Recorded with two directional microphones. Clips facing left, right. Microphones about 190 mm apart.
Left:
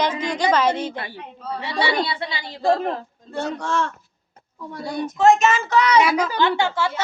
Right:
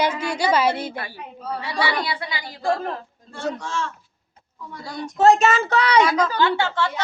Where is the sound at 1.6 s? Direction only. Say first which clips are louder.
Left 3 dB; 25° left (ahead or behind).